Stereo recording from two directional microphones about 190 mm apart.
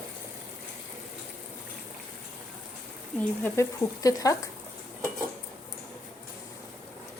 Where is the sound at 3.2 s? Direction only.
10° left (ahead or behind).